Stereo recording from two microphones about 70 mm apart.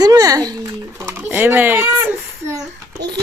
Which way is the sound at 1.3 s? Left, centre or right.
Right.